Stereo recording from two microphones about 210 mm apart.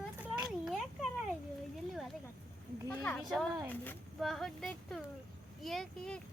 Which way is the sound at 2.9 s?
10° left (ahead or behind).